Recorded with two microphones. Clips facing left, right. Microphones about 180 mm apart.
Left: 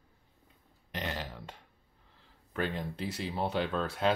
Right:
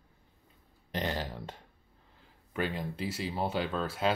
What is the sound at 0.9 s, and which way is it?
Burping, 30° right (ahead or behind).